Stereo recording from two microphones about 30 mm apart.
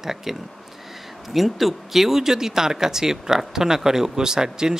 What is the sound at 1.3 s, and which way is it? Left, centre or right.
Speech, centre.